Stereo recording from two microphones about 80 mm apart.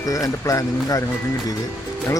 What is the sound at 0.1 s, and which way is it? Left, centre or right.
Speech, left.